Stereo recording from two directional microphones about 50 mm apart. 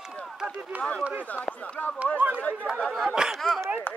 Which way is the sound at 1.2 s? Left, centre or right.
Left.